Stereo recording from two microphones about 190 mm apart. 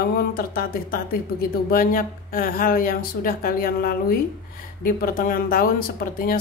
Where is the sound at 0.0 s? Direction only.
50° left (ahead or behind).